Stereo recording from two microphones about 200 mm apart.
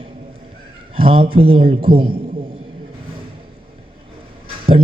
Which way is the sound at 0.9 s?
25° right (ahead or behind).